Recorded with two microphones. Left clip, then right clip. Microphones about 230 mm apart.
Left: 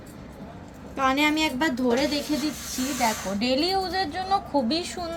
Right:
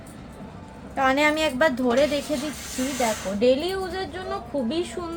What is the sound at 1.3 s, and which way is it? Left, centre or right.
Speech, right.